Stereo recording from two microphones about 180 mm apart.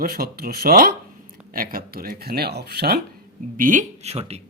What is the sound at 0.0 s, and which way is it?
Speech, 55° right (ahead or behind).